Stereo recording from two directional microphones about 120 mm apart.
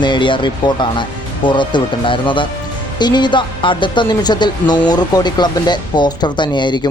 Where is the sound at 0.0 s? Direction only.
40° left (ahead or behind).